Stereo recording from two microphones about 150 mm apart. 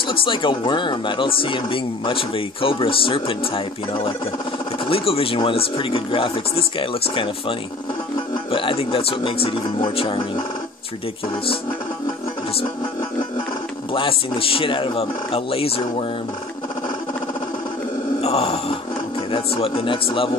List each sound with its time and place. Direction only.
0.1 s speech: 35° left (ahead or behind)
13.9 s speech: 35° left (ahead or behind)
18.2 s grunt: 40° left (ahead or behind)
19.3 s speech: 40° left (ahead or behind)